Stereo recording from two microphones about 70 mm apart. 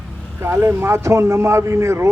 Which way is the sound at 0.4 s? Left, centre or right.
Right.